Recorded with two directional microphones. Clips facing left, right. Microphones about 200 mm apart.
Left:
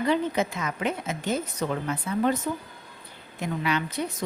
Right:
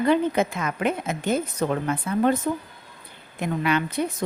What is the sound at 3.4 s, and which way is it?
Speech, 55° right (ahead or behind).